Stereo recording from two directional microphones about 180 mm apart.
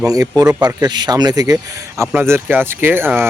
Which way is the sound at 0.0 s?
20° right (ahead or behind).